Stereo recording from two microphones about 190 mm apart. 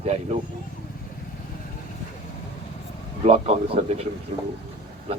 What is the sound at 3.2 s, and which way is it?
Speech, 35° right (ahead or behind).